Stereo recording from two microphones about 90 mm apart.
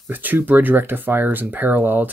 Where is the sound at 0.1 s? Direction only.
20° right (ahead or behind).